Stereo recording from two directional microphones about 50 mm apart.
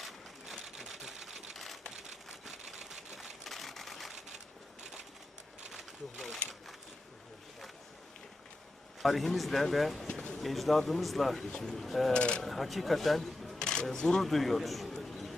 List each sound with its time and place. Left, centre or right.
0.0 s sewing machine: centre
3.4 s sewing machine: centre
4.8 s a sound: centre
5.7 s a sound: centre
9.0 s speech: centre
11.4 s speech: centre
12.1 s speech: left
12.4 s speech: centre
13.6 s camera: centre
13.8 s speech: centre
14.9 s a sound: centre